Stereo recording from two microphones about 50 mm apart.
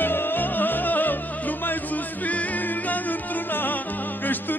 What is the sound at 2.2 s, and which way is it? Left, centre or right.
Music, left.